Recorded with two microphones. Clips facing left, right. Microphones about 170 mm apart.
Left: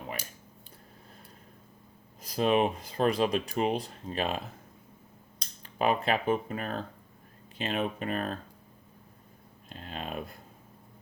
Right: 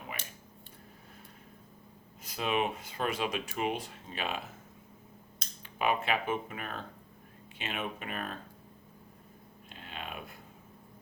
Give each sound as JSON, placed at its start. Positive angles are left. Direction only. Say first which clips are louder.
{"t": 2.2, "sound": "speech", "louder": "left 6 dB", "side_deg": 35}
{"t": 5.6, "sound": "speech", "louder": "left 4 dB", "side_deg": 35}
{"t": 9.6, "sound": "a sound", "louder": "left 5 dB", "side_deg": 40}